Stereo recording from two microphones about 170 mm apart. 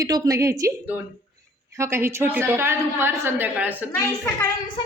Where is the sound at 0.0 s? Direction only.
20° right (ahead or behind).